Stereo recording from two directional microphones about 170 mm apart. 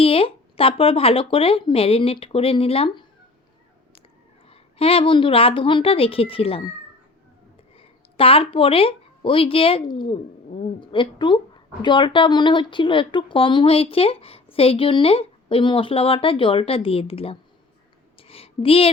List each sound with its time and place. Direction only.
0.0 s speech: 35° left (ahead or behind)
4.4 s speech: 35° left (ahead or behind)
7.8 s speech: 35° left (ahead or behind)
18.2 s a sound: 35° left (ahead or behind)